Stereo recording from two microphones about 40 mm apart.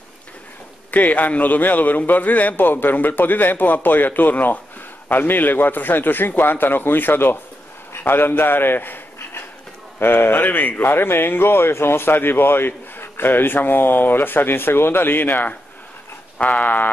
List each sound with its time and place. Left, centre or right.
0.9 s a man's voice: left
9.9 s a man's voice: left